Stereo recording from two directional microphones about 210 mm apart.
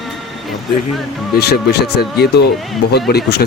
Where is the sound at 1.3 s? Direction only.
50° left (ahead or behind).